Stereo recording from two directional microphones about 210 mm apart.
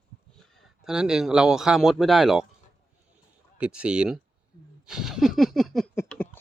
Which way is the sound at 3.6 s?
5° right (ahead or behind).